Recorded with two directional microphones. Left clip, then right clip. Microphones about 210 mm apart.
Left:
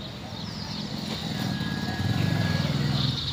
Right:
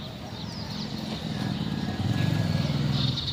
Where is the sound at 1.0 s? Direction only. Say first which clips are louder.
Left 4 dB; 40° left (ahead or behind).